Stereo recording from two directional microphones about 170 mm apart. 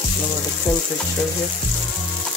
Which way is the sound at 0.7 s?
15° left (ahead or behind).